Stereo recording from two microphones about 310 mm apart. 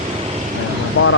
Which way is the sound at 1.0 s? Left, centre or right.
Left.